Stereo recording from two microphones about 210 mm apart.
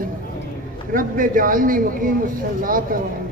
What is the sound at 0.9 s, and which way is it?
A man's voice, 40° right (ahead or behind).